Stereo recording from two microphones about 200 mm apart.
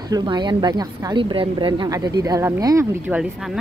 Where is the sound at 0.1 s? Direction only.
20° right (ahead or behind).